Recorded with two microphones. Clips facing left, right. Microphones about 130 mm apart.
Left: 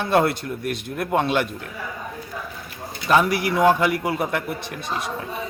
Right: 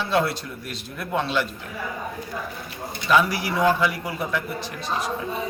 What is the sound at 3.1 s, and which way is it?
A man's voice, 55° left (ahead or behind).